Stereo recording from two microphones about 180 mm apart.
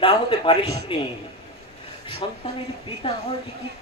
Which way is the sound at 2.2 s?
25° left (ahead or behind).